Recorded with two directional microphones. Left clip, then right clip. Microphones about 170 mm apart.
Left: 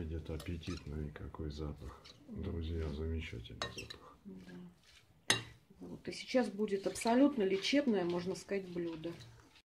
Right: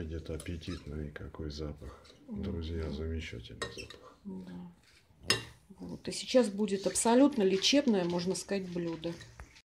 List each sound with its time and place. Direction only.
0.0 s speech: 5° left (ahead or behind)
6.0 s speech: 35° right (ahead or behind)